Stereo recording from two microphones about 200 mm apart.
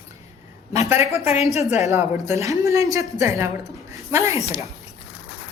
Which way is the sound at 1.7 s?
15° right (ahead or behind).